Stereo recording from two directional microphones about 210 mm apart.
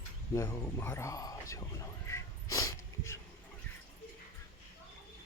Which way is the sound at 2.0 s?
15° left (ahead or behind).